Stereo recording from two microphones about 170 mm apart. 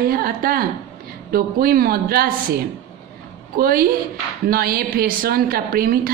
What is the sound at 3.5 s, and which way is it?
A woman's voice, 60° right (ahead or behind).